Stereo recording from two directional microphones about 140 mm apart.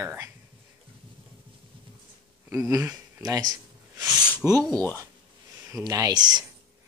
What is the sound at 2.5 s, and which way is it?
Speech, 20° right (ahead or behind).